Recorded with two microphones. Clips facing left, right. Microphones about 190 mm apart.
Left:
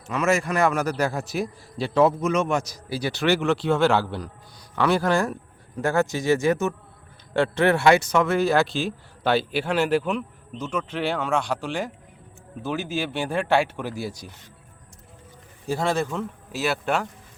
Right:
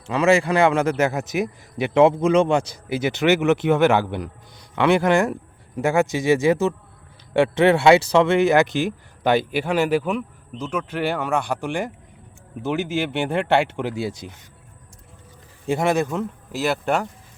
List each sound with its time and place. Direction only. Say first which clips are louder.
0.1 s a man's voice: right 5 dB; 30° right (ahead or behind)
15.6 s speech: right 4 dB; 20° right (ahead or behind)